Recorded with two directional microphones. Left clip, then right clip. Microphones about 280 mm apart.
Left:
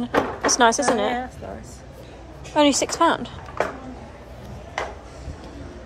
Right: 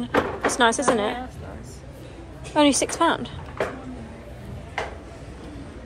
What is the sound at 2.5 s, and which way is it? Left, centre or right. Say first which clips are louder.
Speech: left 1 dB; centre.